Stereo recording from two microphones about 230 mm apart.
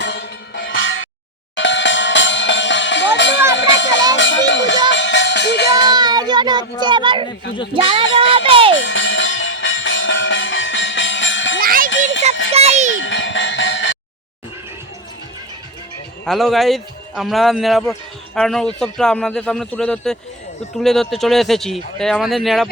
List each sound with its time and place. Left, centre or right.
0.0 s music: left
3.5 s a sound: left
4.1 s music: left
5.9 s music: centre
7.7 s speech: right
8.3 s music: right
8.7 s music: left
11.6 s music: right
11.9 s music: left
12.5 s music: right
13.0 s music: left
16.2 s a man's voice: centre